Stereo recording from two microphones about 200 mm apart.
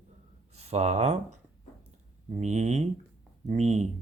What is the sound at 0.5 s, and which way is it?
Speech, 30° right (ahead or behind).